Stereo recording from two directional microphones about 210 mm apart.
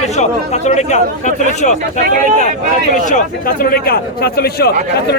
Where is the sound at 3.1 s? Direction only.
40° left (ahead or behind).